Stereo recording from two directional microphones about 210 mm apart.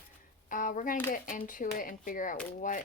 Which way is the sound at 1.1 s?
40° left (ahead or behind).